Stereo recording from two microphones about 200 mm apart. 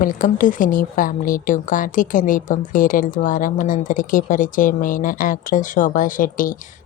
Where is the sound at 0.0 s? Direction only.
40° left (ahead or behind).